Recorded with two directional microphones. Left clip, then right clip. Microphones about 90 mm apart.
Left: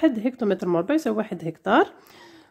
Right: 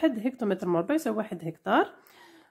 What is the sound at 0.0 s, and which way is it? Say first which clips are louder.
Speech: left 5 dB; 25° left (ahead or behind).